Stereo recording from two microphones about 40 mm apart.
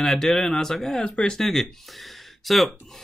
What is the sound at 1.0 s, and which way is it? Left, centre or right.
Speech, left.